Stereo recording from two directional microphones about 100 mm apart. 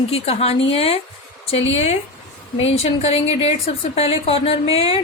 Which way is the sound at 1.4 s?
90° left.